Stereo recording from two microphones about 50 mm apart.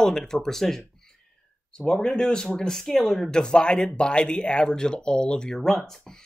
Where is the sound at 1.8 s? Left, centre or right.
Centre.